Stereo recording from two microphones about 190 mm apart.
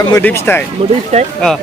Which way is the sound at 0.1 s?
10° left (ahead or behind).